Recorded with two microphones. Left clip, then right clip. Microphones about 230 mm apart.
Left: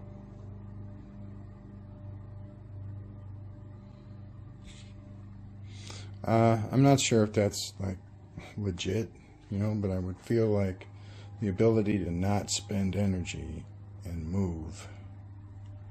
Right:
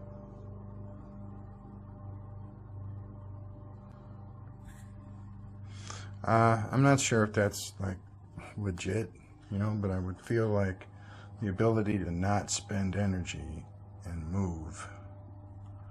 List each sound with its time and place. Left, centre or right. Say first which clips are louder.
5.8 s speech: right 1 dB; centre